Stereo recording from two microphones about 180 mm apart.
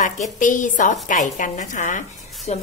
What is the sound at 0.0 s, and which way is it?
Speech, 45° left (ahead or behind).